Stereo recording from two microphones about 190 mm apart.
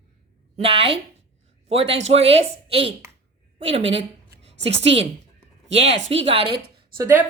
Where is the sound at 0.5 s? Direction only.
30° right (ahead or behind).